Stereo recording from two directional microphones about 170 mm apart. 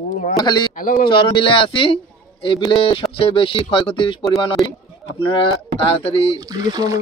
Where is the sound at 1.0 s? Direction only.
30° left (ahead or behind).